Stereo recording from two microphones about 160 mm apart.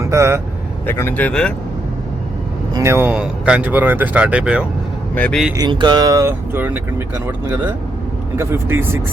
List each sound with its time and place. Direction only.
0.0 s speech: 20° right (ahead or behind)
0.9 s speech: 15° left (ahead or behind)
2.7 s speech: 15° right (ahead or behind)
5.1 s speech: 10° left (ahead or behind)
5.5 s speech: 25° right (ahead or behind)